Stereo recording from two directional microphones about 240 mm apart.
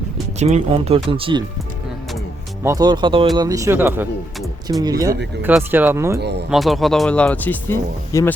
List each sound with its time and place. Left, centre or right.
0.3 s speech: right
2.6 s speech: centre
4.8 s speech: centre
6.1 s speech: right
6.5 s speech: centre